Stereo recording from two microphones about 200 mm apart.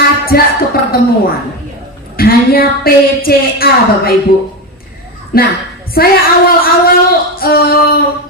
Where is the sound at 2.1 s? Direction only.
50° left (ahead or behind).